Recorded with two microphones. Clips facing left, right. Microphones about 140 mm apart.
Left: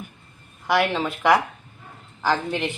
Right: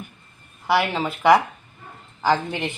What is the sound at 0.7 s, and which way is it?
Speech, 10° right (ahead or behind).